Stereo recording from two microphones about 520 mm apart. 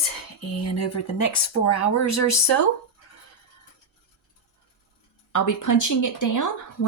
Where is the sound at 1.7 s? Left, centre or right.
Left.